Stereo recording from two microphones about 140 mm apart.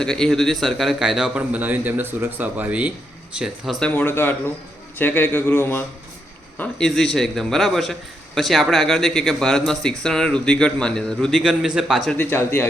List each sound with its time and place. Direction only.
0.0 s a man's voice: 5° left (ahead or behind)
6.6 s a man's voice: 5° left (ahead or behind)
12.1 s speech: 15° left (ahead or behind)